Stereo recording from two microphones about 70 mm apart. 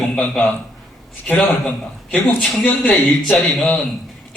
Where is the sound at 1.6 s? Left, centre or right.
Centre.